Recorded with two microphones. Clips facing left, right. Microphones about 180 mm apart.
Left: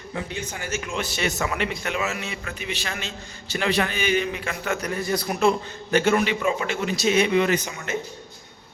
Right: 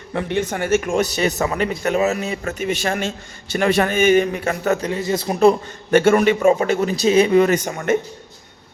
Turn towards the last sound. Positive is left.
turn(degrees=-50)  # may be behind; listen again after turning